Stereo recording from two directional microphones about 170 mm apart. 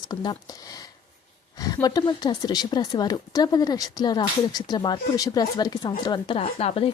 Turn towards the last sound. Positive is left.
turn(degrees=35)  # may be behind; listen again after turning